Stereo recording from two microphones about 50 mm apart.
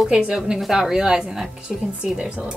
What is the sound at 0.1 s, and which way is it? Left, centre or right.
A woman's voice, centre.